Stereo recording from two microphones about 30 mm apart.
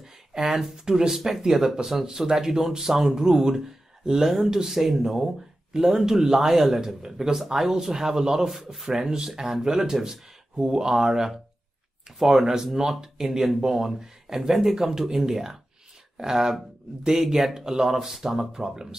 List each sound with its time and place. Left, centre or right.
0.4 s speech: centre
0.7 s speech: centre
18.5 s speech: centre